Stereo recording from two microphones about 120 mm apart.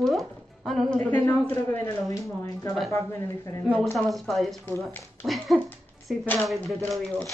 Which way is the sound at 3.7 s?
Centre (ahead or behind).